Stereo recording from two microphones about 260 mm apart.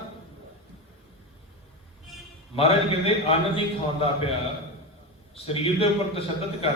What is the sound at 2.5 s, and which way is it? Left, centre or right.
A man's voice, left.